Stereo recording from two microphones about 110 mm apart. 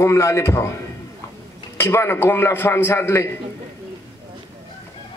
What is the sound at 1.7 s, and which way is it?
A man's voice, 20° left (ahead or behind).